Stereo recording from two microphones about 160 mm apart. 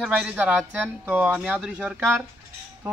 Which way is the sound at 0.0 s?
5° right (ahead or behind).